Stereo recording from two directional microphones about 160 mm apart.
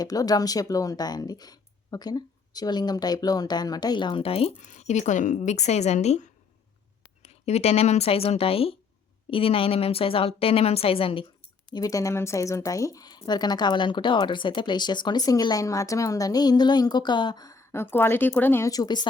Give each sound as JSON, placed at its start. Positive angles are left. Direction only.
{"t": 0.0, "sound": "speech", "side_deg": 25}
{"t": 4.5, "sound": "a woman's voice", "side_deg": 50}
{"t": 11.7, "sound": "speech", "side_deg": 20}